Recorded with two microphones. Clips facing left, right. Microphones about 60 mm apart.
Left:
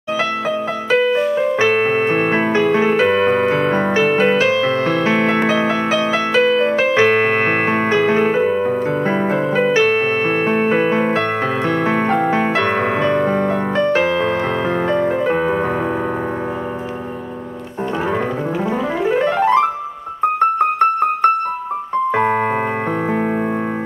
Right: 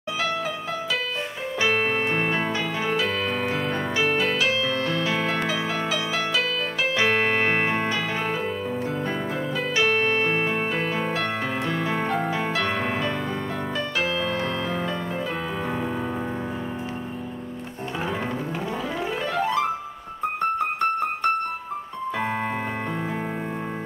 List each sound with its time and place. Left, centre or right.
1.0 s music: left
5.5 s piano: left
10.2 s music: left
10.5 s music: left
19.0 s keyboard: left